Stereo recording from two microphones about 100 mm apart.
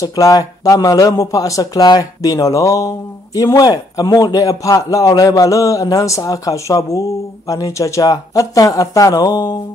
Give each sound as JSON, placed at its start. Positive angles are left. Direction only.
{"t": 0.0, "sound": "a man's voice", "side_deg": 35}